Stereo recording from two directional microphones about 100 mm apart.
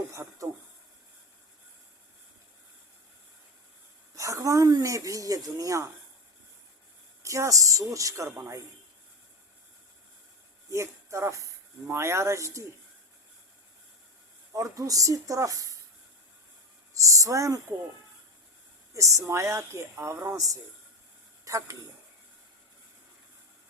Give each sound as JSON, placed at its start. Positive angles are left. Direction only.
{"t": 0.1, "sound": "speech", "side_deg": -30}
{"t": 4.1, "sound": "speech", "side_deg": -30}
{"t": 7.2, "sound": "speech", "side_deg": -30}
{"t": 10.7, "sound": "a woman's voice", "side_deg": -30}
{"t": 14.5, "sound": "speech", "side_deg": -35}
{"t": 16.9, "sound": "speech", "side_deg": -35}
{"t": 18.9, "sound": "a woman's voice", "side_deg": -30}